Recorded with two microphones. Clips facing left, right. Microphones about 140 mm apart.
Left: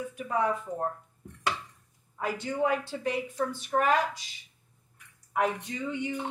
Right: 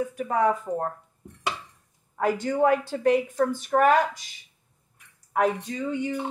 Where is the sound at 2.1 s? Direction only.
50° right (ahead or behind).